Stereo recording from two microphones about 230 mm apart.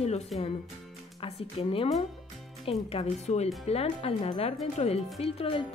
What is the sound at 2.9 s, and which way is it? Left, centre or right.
Speech, left.